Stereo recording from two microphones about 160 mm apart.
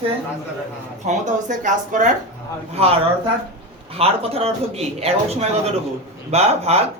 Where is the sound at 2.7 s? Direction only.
40° right (ahead or behind).